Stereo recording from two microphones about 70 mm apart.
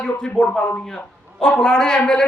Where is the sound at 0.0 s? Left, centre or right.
Centre.